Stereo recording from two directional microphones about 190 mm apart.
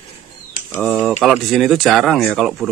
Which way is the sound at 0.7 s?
5° left (ahead or behind).